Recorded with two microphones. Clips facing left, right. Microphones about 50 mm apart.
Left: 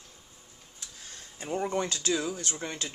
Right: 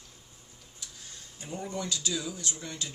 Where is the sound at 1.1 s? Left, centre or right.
Left.